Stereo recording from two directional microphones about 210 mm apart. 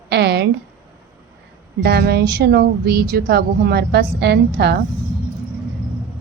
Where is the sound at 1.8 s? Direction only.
50° right (ahead or behind).